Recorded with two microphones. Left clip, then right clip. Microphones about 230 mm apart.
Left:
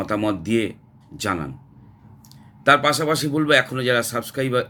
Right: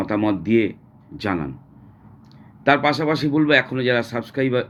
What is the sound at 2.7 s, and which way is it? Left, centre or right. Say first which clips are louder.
Speech: left 1 dB; centre.